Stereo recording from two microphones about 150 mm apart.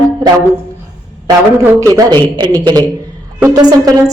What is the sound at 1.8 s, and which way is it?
Speech, 25° right (ahead or behind).